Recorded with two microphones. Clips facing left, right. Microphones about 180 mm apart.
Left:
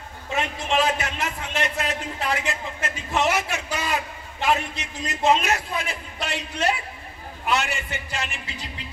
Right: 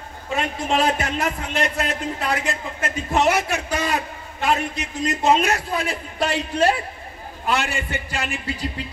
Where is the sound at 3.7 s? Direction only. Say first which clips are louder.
Right 3 dB; 50° right (ahead or behind).